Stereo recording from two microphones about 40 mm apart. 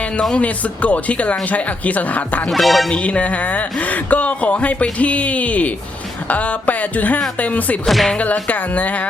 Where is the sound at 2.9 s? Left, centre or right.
Left.